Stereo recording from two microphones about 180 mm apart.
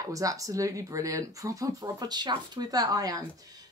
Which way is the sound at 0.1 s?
20° right (ahead or behind).